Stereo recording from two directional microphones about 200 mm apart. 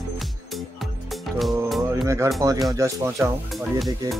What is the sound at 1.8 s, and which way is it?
Speech, 15° right (ahead or behind).